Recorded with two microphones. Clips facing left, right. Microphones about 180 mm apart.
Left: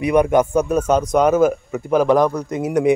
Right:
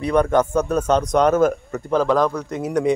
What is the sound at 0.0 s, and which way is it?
A man's voice, 10° left (ahead or behind).